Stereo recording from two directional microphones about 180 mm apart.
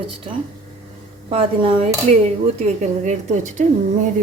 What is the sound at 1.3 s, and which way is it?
A woman's voice, 30° right (ahead or behind).